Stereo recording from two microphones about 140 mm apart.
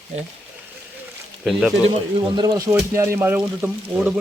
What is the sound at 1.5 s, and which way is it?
Speech, centre (ahead or behind).